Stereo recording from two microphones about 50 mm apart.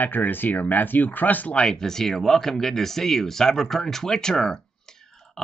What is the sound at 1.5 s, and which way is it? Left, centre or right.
Speech, left.